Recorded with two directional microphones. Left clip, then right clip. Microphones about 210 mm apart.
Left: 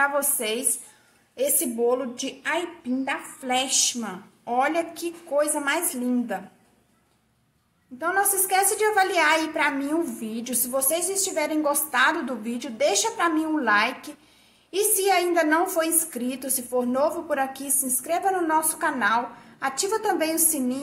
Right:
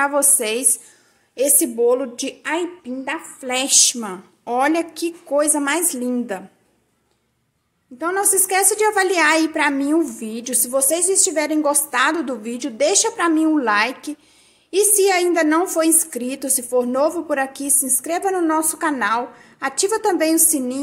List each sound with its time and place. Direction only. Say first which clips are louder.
0.0 s a woman's voice: right 5 dB; 35° right (ahead or behind)
8.0 s a woman's voice: right 3 dB; 35° right (ahead or behind)